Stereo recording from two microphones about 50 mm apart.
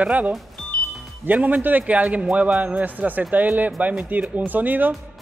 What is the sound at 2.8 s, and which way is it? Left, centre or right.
A man's voice, right.